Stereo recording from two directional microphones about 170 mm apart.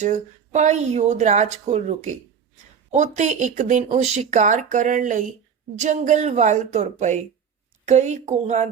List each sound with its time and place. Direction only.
0.0 s speech: 45° right (ahead or behind)